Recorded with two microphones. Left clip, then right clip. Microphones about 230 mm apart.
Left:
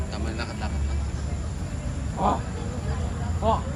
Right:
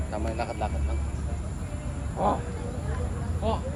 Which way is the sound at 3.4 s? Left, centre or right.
Left.